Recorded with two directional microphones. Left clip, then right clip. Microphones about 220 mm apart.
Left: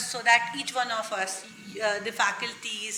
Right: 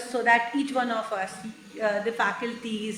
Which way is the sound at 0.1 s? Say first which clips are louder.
Right 1 dB; 40° left (ahead or behind).